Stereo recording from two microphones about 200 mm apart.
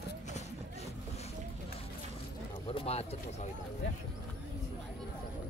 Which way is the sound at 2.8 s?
30° left (ahead or behind).